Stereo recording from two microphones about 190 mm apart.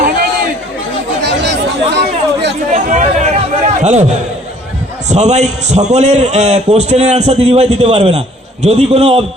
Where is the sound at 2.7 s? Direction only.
40° right (ahead or behind).